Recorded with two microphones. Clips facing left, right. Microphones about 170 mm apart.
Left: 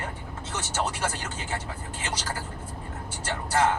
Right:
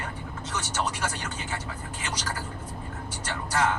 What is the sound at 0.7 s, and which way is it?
Speech, 30° left (ahead or behind).